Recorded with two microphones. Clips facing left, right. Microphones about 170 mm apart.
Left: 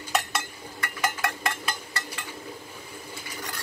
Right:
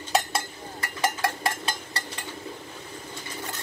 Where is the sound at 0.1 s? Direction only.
30° right (ahead or behind).